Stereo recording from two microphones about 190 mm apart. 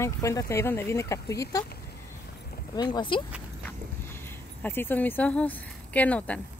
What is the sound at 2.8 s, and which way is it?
Speech, 25° left (ahead or behind).